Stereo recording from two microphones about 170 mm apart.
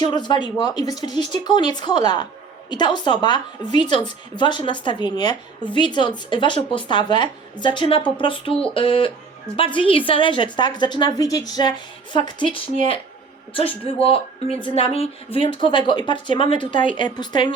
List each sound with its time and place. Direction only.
0.0 s a woman's voice: 25° left (ahead or behind)